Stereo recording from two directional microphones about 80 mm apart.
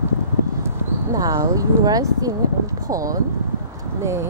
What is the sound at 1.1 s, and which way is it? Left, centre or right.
Speech, right.